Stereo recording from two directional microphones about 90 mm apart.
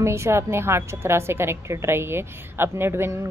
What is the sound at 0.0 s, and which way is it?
A woman's voice, 30° right (ahead or behind).